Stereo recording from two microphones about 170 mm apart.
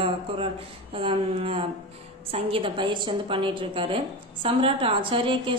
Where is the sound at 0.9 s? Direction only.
35° right (ahead or behind).